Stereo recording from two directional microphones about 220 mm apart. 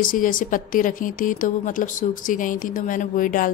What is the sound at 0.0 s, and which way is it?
Speech, 40° left (ahead or behind).